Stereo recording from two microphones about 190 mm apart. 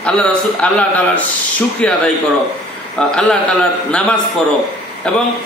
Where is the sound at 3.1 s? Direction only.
5° left (ahead or behind).